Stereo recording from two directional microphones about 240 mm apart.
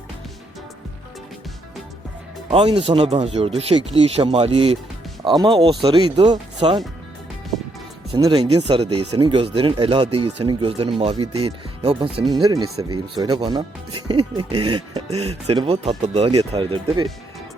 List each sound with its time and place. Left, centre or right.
2.5 s speech: right
8.1 s speech: centre